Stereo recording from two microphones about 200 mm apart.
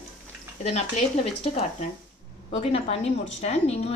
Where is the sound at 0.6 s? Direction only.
30° left (ahead or behind).